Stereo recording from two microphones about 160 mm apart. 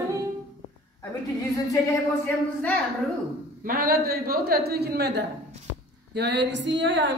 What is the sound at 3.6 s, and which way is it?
A man's voice, 70° right (ahead or behind).